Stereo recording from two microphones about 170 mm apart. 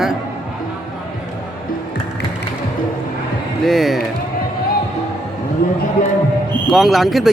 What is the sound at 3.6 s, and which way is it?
Speech, centre (ahead or behind).